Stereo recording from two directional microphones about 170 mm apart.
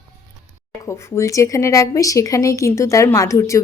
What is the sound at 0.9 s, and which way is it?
A woman's voice, 15° left (ahead or behind).